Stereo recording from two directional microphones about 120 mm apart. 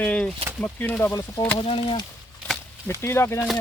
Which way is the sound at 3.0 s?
20° left (ahead or behind).